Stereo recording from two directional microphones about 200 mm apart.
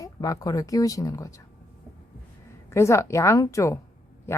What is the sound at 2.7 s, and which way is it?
A woman's voice, 15° left (ahead or behind).